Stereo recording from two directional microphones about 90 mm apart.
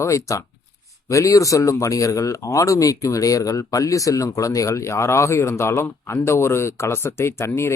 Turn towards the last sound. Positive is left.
turn(degrees=30)  # may be behind; listen again after turning